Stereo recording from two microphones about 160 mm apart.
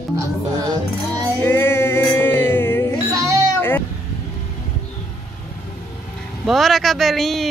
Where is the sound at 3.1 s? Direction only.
20° right (ahead or behind).